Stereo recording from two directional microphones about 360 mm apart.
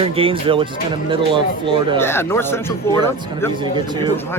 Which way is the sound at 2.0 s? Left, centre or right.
Centre.